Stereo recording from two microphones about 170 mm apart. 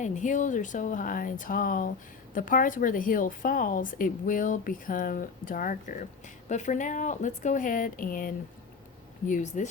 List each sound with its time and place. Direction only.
0.0 s speech: 45° left (ahead or behind)